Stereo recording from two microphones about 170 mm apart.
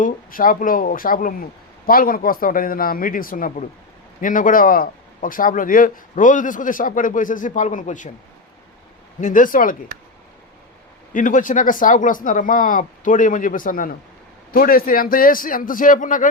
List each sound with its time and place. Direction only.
0.0 s a man's voice: 55° left (ahead or behind)
9.2 s speech: 50° left (ahead or behind)
11.1 s a man's voice: 50° left (ahead or behind)